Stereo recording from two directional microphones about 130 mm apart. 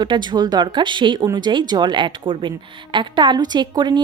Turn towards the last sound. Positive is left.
turn(degrees=-35)  # may be behind; listen again after turning